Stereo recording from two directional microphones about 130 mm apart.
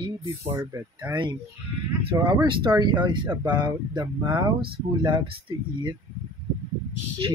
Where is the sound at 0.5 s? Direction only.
20° right (ahead or behind).